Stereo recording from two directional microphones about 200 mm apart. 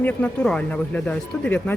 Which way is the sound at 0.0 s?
10° left (ahead or behind).